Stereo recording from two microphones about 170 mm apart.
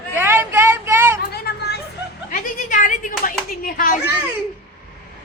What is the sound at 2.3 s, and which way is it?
A child's voice, 50° left (ahead or behind).